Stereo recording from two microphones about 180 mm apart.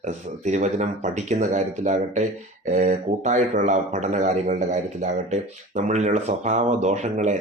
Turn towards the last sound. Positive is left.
turn(degrees=-40)  # may be behind; listen again after turning